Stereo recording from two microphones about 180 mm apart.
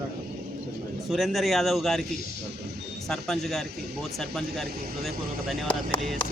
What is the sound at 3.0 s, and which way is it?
Speech, 5° left (ahead or behind).